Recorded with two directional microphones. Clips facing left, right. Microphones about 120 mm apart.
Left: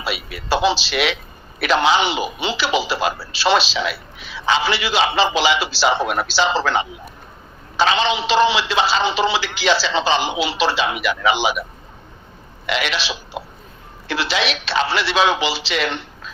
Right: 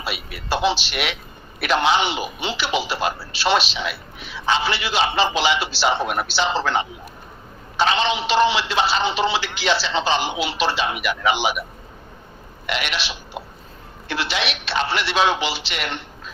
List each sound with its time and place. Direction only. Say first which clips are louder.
0.1 s speech: left 4 dB; 90° left
12.6 s speech: left 4 dB; 90° left